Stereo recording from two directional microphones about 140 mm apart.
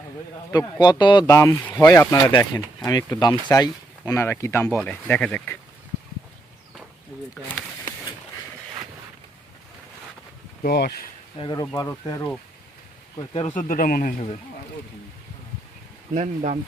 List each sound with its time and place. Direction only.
0.5 s speech: 30° left (ahead or behind)
1.3 s speech: 20° left (ahead or behind)
2.4 s speech: 20° left (ahead or behind)
10.6 s speech: 90° left
11.3 s speech: 35° left (ahead or behind)
13.6 s speech: 75° left (ahead or behind)
16.1 s speech: 55° right (ahead or behind)